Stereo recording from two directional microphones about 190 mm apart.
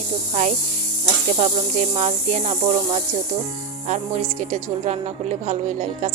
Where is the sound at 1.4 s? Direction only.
35° right (ahead or behind).